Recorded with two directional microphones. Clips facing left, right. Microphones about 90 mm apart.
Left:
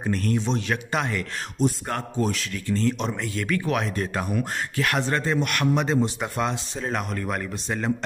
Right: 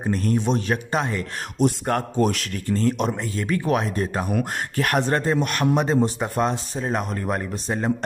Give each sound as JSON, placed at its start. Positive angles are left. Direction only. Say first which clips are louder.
{"t": 0.0, "sound": "speech", "louder": "right 2 dB", "side_deg": -35}
{"t": 1.9, "sound": "a man's voice", "louder": "right 5 dB", "side_deg": -55}
{"t": 2.5, "sound": "speech", "louder": "right 2 dB", "side_deg": -40}
{"t": 4.3, "sound": "speech", "louder": "right 2 dB", "side_deg": -50}